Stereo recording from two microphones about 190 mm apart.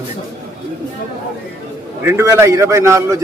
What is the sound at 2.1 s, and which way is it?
A man's voice, 15° right (ahead or behind).